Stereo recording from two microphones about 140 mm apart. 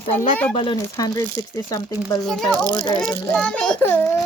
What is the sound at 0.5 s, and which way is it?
Speech, 40° left (ahead or behind).